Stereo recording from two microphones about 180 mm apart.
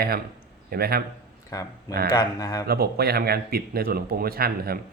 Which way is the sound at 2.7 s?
60° right (ahead or behind).